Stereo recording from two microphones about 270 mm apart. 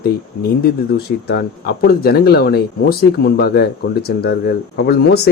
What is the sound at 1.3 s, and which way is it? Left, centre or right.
Speech, left.